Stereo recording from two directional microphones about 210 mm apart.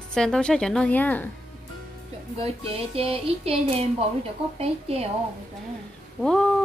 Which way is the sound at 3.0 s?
25° right (ahead or behind).